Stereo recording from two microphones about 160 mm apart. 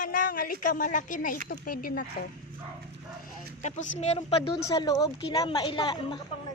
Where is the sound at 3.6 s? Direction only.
45° left (ahead or behind).